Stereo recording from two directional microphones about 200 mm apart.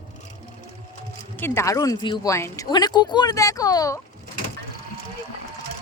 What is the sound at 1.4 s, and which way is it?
Speech, 10° left (ahead or behind).